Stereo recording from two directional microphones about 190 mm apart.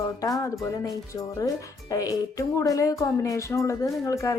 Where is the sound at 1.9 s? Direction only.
20° left (ahead or behind).